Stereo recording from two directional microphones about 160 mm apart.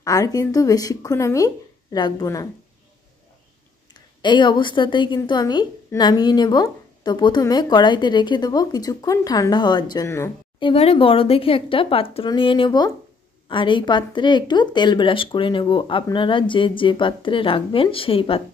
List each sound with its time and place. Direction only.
0.0 s a woman's voice: 20° left (ahead or behind)
4.2 s a woman's voice: 30° left (ahead or behind)
10.6 s speech: 35° left (ahead or behind)